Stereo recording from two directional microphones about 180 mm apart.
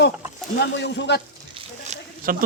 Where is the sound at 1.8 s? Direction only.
50° right (ahead or behind).